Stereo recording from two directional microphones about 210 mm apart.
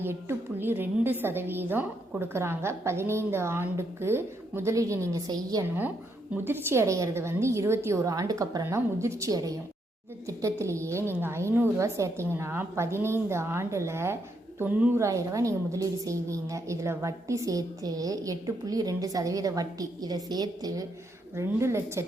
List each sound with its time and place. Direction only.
0.0 s a woman's voice: 10° right (ahead or behind)